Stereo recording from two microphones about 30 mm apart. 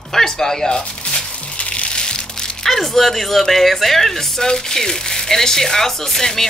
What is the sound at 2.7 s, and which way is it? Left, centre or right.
Speech, centre.